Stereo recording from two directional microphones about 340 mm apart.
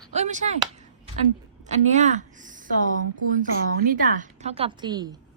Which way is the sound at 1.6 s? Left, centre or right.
Right.